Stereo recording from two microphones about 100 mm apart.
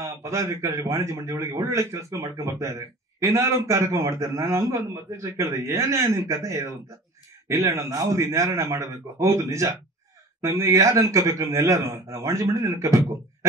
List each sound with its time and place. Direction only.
0.0 s a man's voice: 30° right (ahead or behind)